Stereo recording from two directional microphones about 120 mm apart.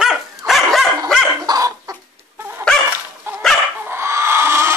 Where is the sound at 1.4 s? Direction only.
30° right (ahead or behind).